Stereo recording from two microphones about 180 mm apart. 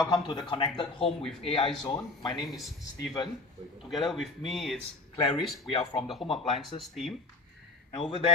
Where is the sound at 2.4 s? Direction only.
Centre (ahead or behind).